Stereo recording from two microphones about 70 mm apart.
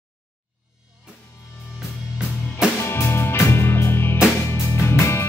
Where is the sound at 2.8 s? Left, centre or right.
Left.